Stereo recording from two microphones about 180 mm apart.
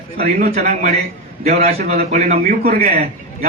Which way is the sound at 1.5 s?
35° right (ahead or behind).